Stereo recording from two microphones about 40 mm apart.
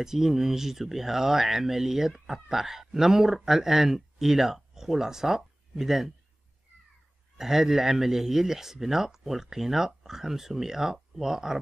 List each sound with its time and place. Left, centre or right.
0.0 s speech: centre
7.3 s speech: centre